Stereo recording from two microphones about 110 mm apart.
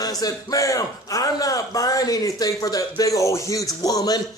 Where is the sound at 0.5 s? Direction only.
30° left (ahead or behind).